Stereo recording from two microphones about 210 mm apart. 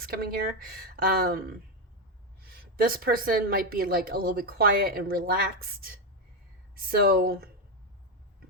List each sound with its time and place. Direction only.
0.0 s a woman's voice: 45° right (ahead or behind)